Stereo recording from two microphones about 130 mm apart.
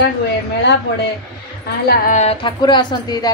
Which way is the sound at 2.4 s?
35° left (ahead or behind).